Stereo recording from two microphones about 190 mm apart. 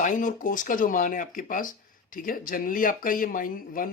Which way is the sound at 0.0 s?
45° left (ahead or behind).